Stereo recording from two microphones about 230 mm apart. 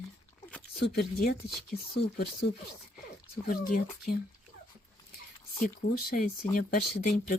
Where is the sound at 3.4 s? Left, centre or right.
Left.